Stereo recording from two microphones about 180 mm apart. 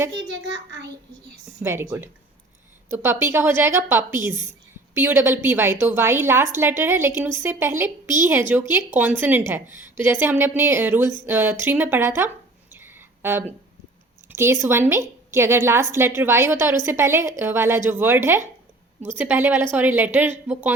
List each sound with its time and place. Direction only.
0.3 s a child's voice: 90° right
1.6 s speech: 15° right (ahead or behind)
12.7 s a sound: 10° right (ahead or behind)
14.3 s speech: 15° right (ahead or behind)